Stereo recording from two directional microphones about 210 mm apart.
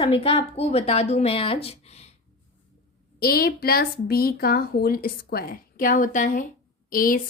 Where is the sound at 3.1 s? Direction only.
45° left (ahead or behind).